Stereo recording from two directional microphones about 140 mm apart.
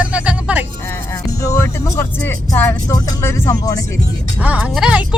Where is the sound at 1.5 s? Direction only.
15° left (ahead or behind).